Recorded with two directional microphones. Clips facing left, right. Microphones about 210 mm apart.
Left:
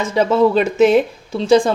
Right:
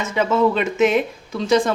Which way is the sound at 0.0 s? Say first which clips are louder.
Left 4 dB; 30° left (ahead or behind).